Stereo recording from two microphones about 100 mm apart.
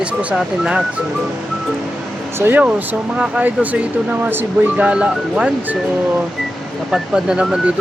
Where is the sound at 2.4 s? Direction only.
20° right (ahead or behind).